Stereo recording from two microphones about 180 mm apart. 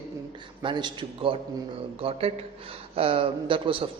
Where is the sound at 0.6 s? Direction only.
25° right (ahead or behind).